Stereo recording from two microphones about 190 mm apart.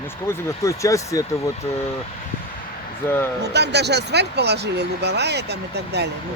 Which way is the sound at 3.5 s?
60° right (ahead or behind).